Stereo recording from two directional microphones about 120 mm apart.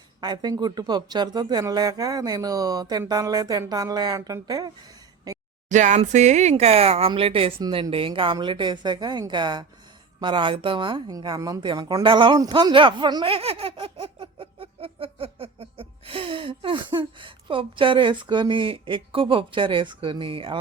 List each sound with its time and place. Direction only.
0.2 s speech: 35° right (ahead or behind)
5.6 s speech: 90° right; by 13.2 s 40° right (ahead or behind)
13.2 s giggle: 50° right (ahead or behind)